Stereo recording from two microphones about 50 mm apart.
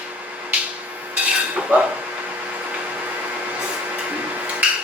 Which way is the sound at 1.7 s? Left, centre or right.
Right.